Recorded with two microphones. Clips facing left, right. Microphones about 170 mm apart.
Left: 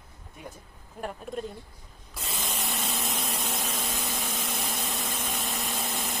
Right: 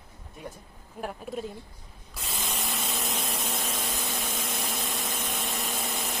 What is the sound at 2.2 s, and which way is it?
Spray, centre (ahead or behind).